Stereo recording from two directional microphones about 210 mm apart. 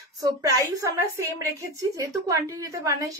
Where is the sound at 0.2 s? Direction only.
15° right (ahead or behind).